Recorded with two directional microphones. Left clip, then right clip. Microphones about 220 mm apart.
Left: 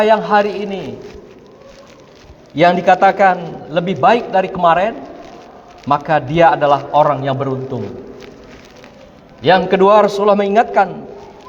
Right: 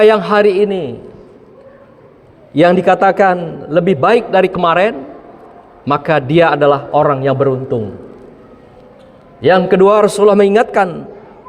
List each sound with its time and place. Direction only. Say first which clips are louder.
0.0 s a man's voice: right 3 dB; 55° right (ahead or behind)
2.6 s a man's voice: right 1 dB; 55° right (ahead or behind)
9.4 s a man's voice: right 2 dB; 50° right (ahead or behind)